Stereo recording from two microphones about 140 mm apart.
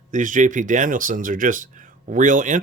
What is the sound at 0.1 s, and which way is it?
Speech, 65° right (ahead or behind).